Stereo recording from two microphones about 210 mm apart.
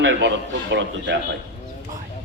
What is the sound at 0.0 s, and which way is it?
A man's voice, 65° right (ahead or behind).